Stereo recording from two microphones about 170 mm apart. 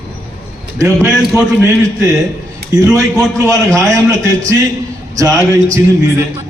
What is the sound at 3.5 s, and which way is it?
Speech, 20° right (ahead or behind).